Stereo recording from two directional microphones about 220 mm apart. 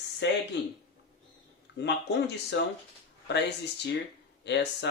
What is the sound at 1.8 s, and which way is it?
Speech, 50° left (ahead or behind).